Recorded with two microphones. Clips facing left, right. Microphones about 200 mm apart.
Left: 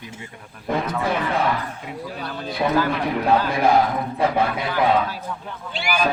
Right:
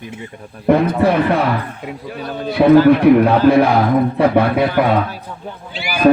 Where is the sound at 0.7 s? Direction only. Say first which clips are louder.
Right 10 dB; 65° right (ahead or behind).